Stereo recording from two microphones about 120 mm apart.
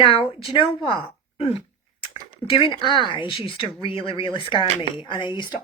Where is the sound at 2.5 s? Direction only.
50° left (ahead or behind).